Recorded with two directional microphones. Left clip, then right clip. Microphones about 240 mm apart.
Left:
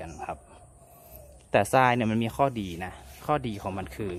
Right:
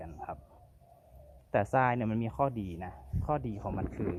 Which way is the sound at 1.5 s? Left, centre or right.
Centre.